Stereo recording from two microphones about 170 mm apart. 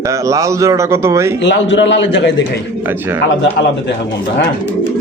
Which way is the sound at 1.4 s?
90° left.